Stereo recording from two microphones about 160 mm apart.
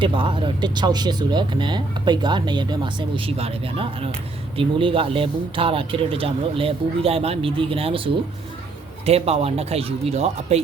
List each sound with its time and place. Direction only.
0.0 s speech: 30° right (ahead or behind)